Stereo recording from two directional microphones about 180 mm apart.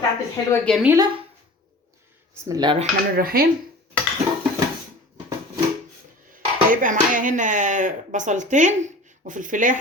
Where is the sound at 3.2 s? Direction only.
55° right (ahead or behind).